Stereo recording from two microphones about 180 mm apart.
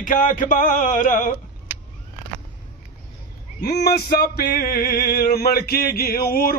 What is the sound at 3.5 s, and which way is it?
Male singing, 65° left (ahead or behind).